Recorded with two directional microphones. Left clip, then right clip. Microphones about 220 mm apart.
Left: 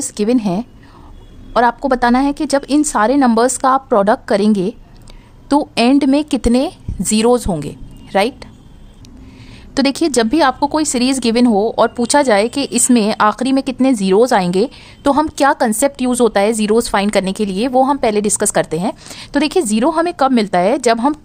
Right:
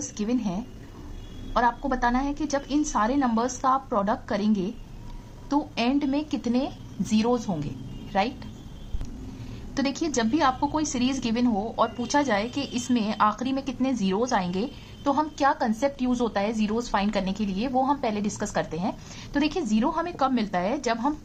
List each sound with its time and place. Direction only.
0.1 s a woman's voice: 45° left (ahead or behind)
9.7 s a woman's voice: 50° left (ahead or behind)